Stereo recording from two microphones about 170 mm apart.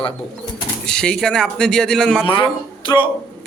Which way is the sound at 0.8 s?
5° left (ahead or behind).